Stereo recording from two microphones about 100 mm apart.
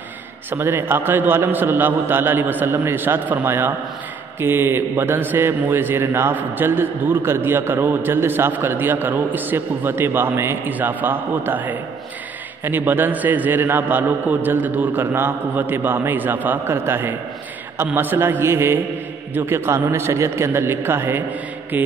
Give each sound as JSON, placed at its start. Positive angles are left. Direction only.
{"t": 0.5, "sound": "a man's voice", "side_deg": -20}
{"t": 21.7, "sound": "music", "side_deg": -15}